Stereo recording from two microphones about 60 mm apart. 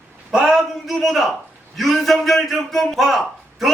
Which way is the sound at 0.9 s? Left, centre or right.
Centre.